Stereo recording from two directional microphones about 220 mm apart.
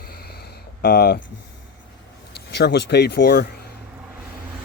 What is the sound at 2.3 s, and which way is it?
Speech, 50° left (ahead or behind).